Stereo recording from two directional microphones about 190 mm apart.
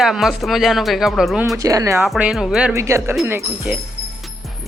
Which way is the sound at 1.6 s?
15° right (ahead or behind).